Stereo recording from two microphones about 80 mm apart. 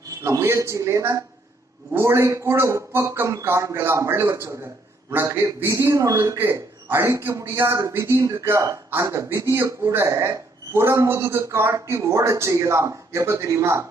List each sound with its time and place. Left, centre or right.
0.2 s a man's voice: right
8.2 s a man's voice: right